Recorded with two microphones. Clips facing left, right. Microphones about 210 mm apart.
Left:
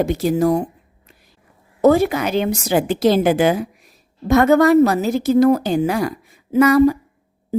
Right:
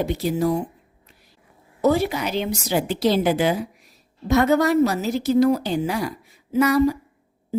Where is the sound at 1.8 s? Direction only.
50° left (ahead or behind).